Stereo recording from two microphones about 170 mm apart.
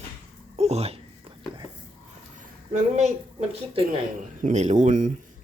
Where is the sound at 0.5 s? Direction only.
40° right (ahead or behind).